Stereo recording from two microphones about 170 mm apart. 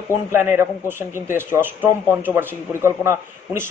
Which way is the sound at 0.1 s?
15° right (ahead or behind).